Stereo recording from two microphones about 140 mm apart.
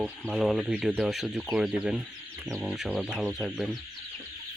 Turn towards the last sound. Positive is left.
turn(degrees=0)  # may be behind; listen again after turning